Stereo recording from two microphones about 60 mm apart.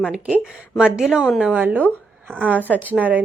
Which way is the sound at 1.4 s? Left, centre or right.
Right.